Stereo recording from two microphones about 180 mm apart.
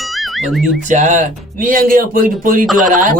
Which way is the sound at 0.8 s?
45° right (ahead or behind).